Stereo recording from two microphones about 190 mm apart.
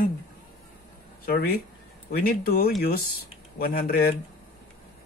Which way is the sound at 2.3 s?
50° left (ahead or behind).